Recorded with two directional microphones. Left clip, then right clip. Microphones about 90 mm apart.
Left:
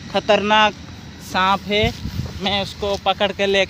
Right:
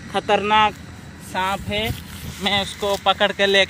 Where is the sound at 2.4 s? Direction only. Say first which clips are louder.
Even; 40° left (ahead or behind).